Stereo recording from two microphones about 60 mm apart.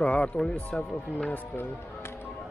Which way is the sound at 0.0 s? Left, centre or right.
Left.